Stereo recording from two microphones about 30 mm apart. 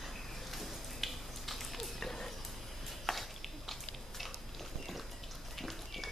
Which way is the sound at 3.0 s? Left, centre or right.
Centre.